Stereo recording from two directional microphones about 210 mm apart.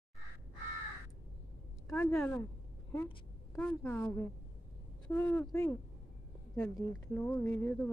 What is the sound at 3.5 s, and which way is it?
A woman's voice, 5° left (ahead or behind).